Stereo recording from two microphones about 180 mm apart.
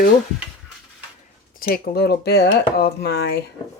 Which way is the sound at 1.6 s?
60° left (ahead or behind).